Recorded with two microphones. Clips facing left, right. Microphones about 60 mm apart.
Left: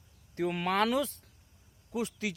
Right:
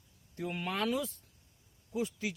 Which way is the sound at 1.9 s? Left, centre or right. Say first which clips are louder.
Left 1 dB; left.